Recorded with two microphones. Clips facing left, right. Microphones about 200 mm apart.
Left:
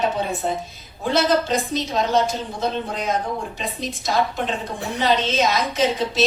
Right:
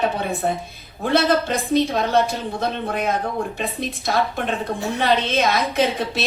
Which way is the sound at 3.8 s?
55° right (ahead or behind).